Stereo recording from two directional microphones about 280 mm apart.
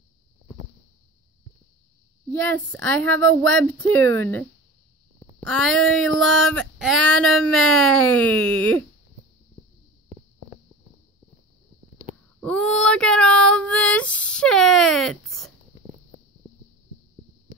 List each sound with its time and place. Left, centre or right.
2.5 s speech: centre
12.4 s female singing: centre
17.5 s a sound: centre